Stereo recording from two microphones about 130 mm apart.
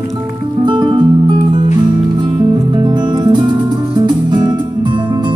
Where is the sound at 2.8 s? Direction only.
35° right (ahead or behind).